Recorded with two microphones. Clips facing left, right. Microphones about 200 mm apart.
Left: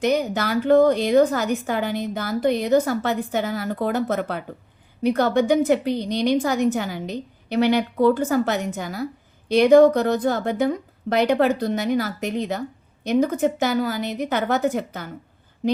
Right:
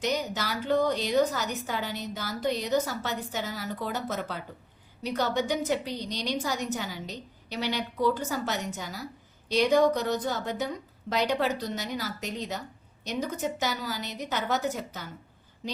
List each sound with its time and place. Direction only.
0.0 s a woman's voice: 55° left (ahead or behind)